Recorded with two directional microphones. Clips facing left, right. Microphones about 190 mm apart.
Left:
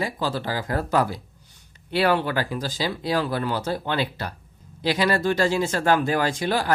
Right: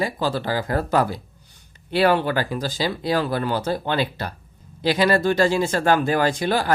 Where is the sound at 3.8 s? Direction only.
35° right (ahead or behind).